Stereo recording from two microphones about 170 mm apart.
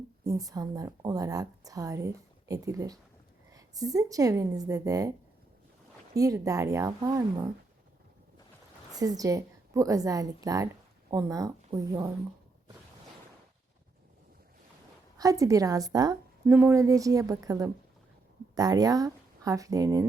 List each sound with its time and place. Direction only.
0.3 s a woman's voice: 20° right (ahead or behind)
6.1 s a woman's voice: 20° right (ahead or behind)
8.9 s a woman's voice: 20° right (ahead or behind)
15.2 s a woman's voice: 20° right (ahead or behind)